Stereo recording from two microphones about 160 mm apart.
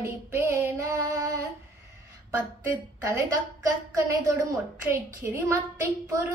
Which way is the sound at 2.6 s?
20° right (ahead or behind).